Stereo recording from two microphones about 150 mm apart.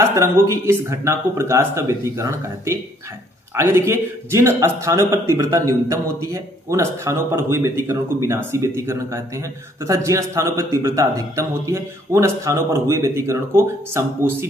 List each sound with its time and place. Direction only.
0.0 s a man's voice: 15° right (ahead or behind)